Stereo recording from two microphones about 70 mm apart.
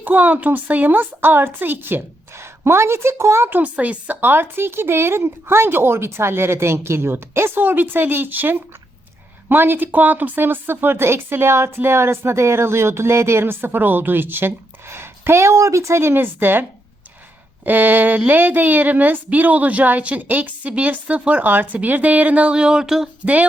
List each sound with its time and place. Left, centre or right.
0.0 s a woman's voice: right
3.6 s a woman's voice: centre
23.2 s a woman's voice: right